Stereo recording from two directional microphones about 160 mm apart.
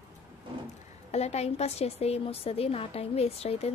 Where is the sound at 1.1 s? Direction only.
40° left (ahead or behind).